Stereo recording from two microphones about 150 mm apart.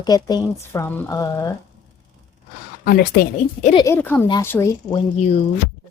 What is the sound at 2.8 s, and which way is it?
Speech, 90° left.